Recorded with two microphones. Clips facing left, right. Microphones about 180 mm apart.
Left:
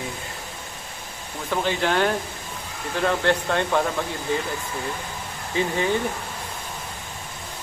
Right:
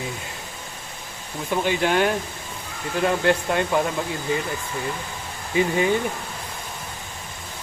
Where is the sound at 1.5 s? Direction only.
15° right (ahead or behind).